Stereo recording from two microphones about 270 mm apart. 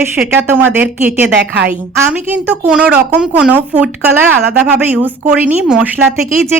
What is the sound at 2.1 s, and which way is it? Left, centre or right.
A woman's voice, centre.